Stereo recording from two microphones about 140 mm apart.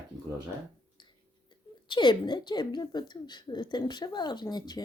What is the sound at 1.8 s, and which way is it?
A woman's voice, 35° left (ahead or behind).